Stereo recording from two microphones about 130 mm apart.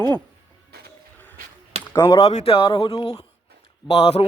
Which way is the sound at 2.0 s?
30° left (ahead or behind).